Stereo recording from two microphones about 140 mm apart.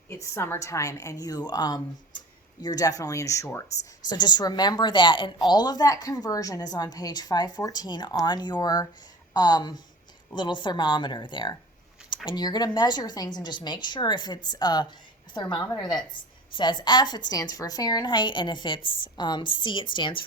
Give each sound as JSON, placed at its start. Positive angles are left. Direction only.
{"t": 0.1, "sound": "a woman's voice", "side_deg": 20}